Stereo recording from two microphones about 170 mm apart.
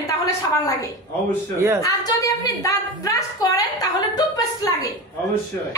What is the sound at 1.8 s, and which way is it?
A woman's voice, 20° left (ahead or behind).